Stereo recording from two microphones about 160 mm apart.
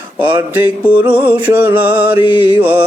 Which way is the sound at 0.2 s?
10° right (ahead or behind).